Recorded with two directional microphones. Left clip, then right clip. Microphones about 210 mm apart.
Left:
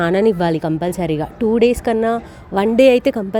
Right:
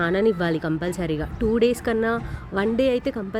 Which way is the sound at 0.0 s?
30° left (ahead or behind).